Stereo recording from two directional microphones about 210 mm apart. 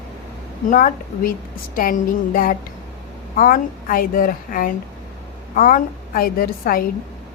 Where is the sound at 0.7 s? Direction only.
40° left (ahead or behind).